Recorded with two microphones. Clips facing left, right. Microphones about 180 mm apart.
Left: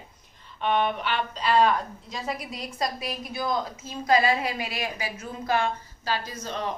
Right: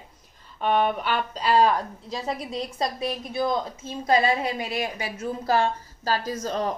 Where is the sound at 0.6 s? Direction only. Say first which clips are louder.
Right 2 dB; 40° right (ahead or behind).